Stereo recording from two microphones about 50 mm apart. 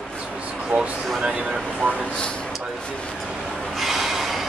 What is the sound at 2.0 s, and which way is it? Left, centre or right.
Speech, centre.